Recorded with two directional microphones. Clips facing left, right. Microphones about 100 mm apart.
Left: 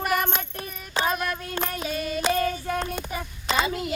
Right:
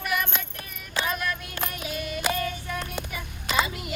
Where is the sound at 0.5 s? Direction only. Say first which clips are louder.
Left 3 dB; 35° left (ahead or behind).